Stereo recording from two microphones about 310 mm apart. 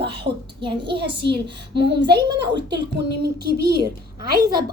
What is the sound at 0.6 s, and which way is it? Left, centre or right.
A woman's voice, centre.